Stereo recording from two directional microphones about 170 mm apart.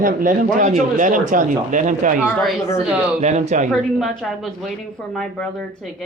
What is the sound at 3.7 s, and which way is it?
A woman's voice, centre (ahead or behind).